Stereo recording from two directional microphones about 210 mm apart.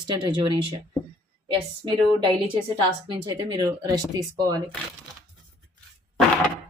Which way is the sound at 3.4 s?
20° right (ahead or behind).